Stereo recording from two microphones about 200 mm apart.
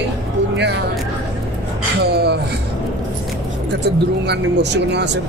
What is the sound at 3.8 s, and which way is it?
Speech, 55° right (ahead or behind).